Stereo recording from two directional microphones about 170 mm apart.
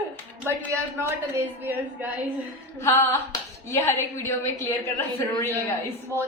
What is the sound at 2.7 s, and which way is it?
A woman's voice, 15° left (ahead or behind).